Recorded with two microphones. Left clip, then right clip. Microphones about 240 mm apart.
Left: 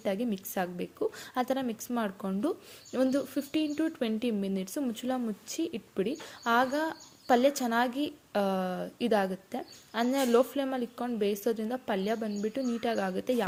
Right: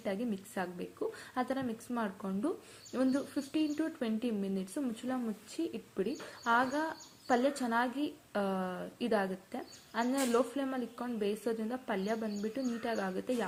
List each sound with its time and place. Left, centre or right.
0.0 s speech: left